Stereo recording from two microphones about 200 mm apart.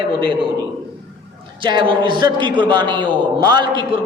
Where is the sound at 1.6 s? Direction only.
25° right (ahead or behind).